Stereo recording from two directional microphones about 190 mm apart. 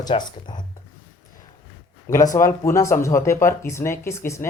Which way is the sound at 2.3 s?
15° left (ahead or behind).